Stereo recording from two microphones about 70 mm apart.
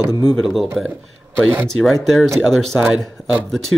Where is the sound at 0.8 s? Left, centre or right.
Right.